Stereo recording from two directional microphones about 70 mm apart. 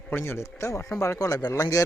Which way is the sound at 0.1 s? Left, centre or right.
Left.